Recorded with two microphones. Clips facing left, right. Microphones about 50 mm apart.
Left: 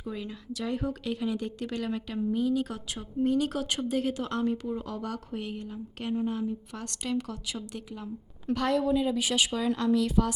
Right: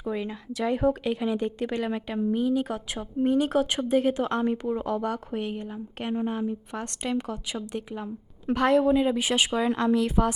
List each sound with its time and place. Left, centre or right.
0.0 s a woman's voice: right